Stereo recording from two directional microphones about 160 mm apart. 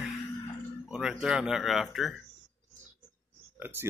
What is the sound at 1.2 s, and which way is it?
Speech, 5° right (ahead or behind).